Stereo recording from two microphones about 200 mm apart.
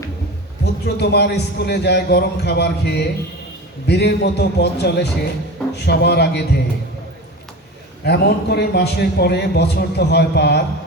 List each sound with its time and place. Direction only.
0.6 s a man's voice: 55° left (ahead or behind)
8.0 s a man's voice: 55° left (ahead or behind)